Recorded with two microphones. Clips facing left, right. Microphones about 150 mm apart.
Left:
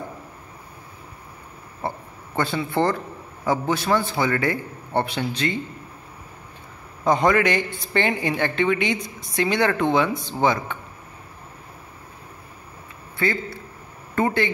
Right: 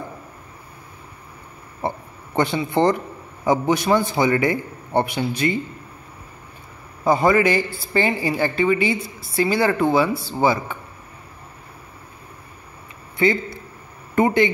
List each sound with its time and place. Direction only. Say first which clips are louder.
1.8 s a sound: right 3 dB; 20° right (ahead or behind)
3.4 s a man's voice: right 4 dB; 15° right (ahead or behind)
7.1 s a man's voice: right 2 dB; 5° right (ahead or behind)
13.2 s a man's voice: right 5 dB; 15° right (ahead or behind)